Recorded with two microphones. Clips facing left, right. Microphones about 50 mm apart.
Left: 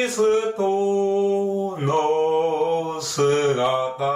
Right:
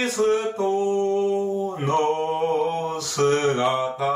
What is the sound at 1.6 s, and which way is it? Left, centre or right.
Mantra, centre.